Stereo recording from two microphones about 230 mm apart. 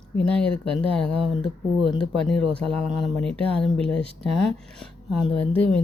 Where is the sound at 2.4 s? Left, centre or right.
Right.